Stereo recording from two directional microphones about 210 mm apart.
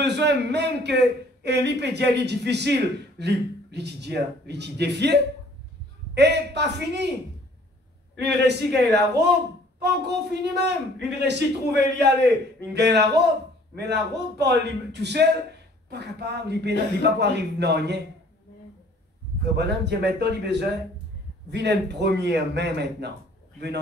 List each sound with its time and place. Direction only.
0.0 s a man's voice: 55° right (ahead or behind)
8.2 s a man's voice: 55° right (ahead or behind)
19.5 s a man's voice: 55° right (ahead or behind)